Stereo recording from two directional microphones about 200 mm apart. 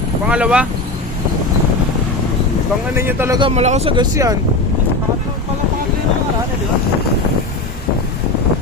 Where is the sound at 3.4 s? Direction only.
30° right (ahead or behind).